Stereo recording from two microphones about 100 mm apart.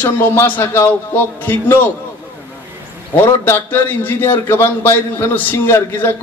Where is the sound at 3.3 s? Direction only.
25° left (ahead or behind).